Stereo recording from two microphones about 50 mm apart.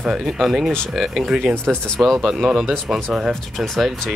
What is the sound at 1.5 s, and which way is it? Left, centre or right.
Speech, right.